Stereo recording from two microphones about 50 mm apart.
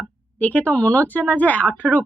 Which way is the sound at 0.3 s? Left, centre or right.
Left.